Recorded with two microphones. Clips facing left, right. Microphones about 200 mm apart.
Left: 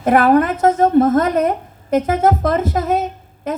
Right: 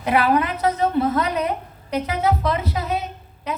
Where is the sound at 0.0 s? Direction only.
50° left (ahead or behind).